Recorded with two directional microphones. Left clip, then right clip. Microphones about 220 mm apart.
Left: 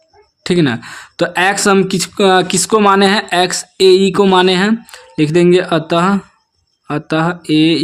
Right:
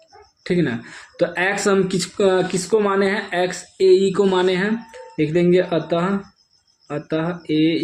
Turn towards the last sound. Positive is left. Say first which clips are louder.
# left 7 dB
turn(degrees=45)  # may be behind; listen again after turning